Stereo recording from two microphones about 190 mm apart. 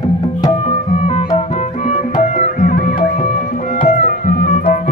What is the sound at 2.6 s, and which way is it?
Music, 45° left (ahead or behind).